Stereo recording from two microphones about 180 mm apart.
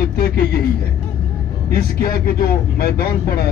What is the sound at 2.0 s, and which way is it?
Speech, 55° left (ahead or behind).